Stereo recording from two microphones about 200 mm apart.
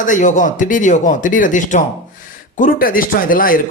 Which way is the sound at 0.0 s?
40° left (ahead or behind).